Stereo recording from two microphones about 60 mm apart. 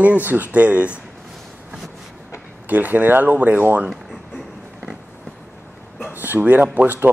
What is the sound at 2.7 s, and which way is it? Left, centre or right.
Speech, right.